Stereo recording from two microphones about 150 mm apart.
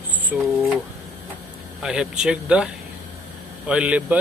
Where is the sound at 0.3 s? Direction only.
10° right (ahead or behind).